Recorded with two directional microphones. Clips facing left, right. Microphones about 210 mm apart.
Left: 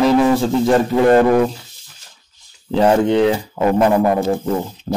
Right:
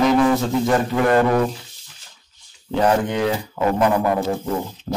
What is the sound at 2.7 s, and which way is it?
A man's voice, 30° left (ahead or behind).